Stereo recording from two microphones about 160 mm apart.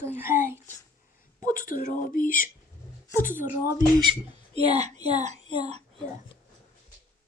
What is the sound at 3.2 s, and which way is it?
Speech, 55° left (ahead or behind).